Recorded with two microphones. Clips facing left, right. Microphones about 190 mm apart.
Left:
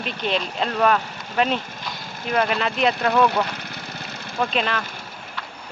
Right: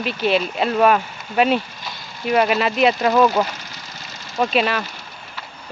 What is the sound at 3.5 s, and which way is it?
Vehicle, 60° left (ahead or behind).